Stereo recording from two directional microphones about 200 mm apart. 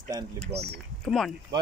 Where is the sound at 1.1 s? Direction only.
Centre (ahead or behind).